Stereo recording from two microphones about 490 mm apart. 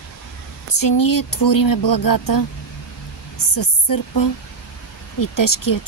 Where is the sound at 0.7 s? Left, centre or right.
Left.